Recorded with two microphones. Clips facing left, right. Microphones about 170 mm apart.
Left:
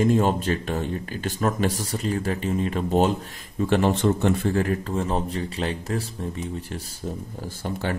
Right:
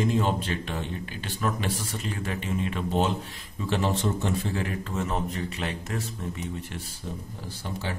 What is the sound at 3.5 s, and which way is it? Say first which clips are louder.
Speech: left 6 dB; 55° left (ahead or behind).